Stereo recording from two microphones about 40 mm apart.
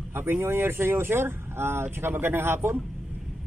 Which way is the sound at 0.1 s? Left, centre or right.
Right.